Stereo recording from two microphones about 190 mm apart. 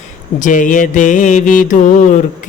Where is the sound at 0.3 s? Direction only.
45° left (ahead or behind).